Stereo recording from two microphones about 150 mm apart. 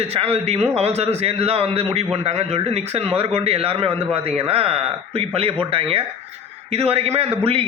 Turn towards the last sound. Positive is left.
turn(degrees=-35)  # may be behind; listen again after turning